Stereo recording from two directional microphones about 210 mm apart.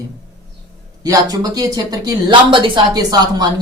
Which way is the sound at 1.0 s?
15° right (ahead or behind).